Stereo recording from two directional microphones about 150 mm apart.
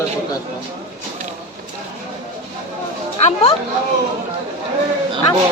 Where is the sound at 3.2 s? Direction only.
40° left (ahead or behind).